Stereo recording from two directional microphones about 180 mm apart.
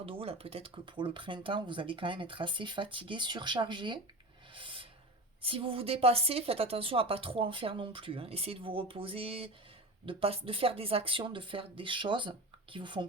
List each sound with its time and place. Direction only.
0.0 s speech: 30° right (ahead or behind)
4.5 s a sound: 30° right (ahead or behind)
5.4 s a woman's voice: 30° right (ahead or behind)